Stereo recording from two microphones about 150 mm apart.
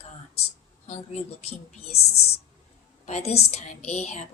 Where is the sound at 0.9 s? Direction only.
45° left (ahead or behind).